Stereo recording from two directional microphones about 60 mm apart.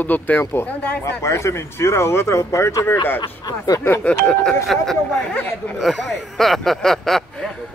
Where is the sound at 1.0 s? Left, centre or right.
Left.